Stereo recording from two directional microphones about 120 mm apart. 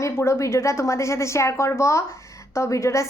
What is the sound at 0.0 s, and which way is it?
A woman's voice, 25° left (ahead or behind).